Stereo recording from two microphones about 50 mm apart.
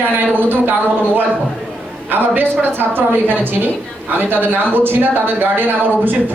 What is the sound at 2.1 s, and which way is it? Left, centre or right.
A woman's voice, right.